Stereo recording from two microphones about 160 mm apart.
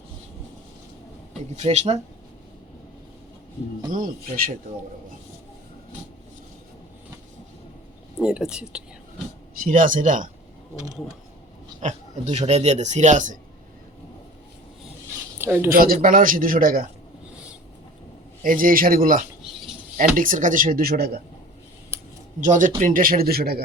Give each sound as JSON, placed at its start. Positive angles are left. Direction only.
{"t": 1.5, "sound": "speech", "side_deg": -45}
{"t": 3.9, "sound": "a man's voice", "side_deg": -60}
{"t": 8.2, "sound": "speech", "side_deg": -5}
{"t": 9.6, "sound": "a man's voice", "side_deg": -55}
{"t": 11.8, "sound": "speech", "side_deg": -45}
{"t": 15.4, "sound": "a woman's voice", "side_deg": -15}
{"t": 15.7, "sound": "a man's voice", "side_deg": -60}
{"t": 18.4, "sound": "a man's voice", "side_deg": -60}
{"t": 22.4, "sound": "a man's voice", "side_deg": -55}